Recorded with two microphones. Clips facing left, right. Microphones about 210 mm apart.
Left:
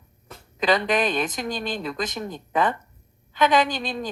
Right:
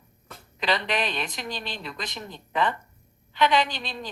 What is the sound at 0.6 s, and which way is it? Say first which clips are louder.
Speech: left 6 dB; 45° left (ahead or behind).